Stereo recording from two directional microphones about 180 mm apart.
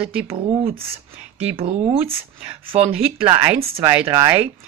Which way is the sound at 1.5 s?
35° right (ahead or behind).